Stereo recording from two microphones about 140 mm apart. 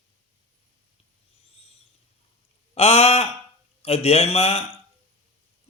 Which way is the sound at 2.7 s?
45° left (ahead or behind).